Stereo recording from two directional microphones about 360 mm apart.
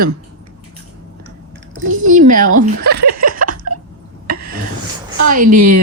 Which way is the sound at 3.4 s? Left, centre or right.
Right.